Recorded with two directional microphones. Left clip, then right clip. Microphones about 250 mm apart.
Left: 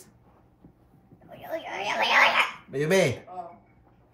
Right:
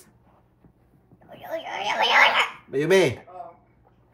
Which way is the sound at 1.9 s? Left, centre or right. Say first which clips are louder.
Right 3 dB; right.